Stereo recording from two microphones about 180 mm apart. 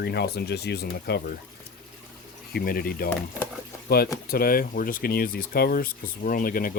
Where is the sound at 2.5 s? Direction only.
55° left (ahead or behind).